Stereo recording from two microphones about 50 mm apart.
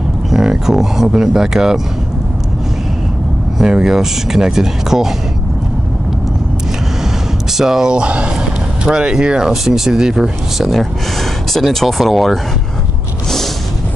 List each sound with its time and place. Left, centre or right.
0.3 s speech: centre
3.5 s speech: centre
7.5 s speech: centre
11.5 s speech: centre